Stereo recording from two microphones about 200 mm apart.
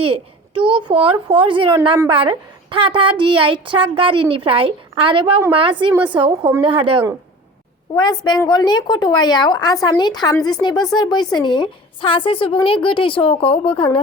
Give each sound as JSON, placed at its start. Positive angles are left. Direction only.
{"t": 0.0, "sound": "a woman's voice", "side_deg": -25}
{"t": 7.9, "sound": "speech", "side_deg": 20}